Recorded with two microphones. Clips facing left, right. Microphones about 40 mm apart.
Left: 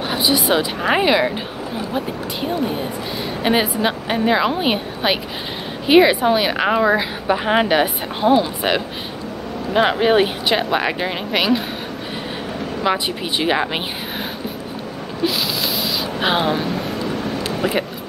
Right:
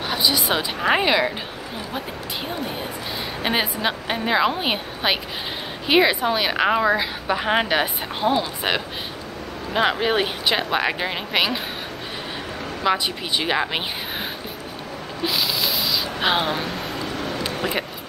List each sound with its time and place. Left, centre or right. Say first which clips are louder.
0.1 s a sound: left 3 dB; centre
0.5 s a woman's voice: left 3 dB; centre
3.4 s a woman's voice: left 5 dB; centre
12.9 s a woman's voice: left 1 dB; centre
15.2 s a sound: left 2 dB; centre
15.8 s spray: left 2 dB; centre